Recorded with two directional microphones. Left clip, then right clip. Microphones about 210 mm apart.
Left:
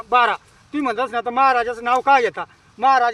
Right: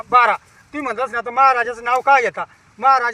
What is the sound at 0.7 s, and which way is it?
Speech, 40° left (ahead or behind).